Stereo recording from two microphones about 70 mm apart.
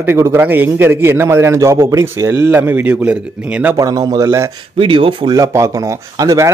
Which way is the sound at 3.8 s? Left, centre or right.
Right.